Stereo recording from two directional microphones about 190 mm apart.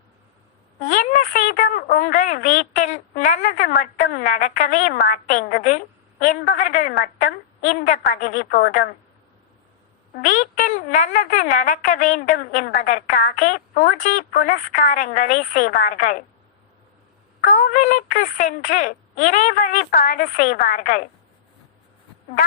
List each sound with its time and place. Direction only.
0.8 s a woman's voice: 45° left (ahead or behind)
10.2 s a woman's voice: 45° left (ahead or behind)
17.4 s a woman's voice: 40° left (ahead or behind)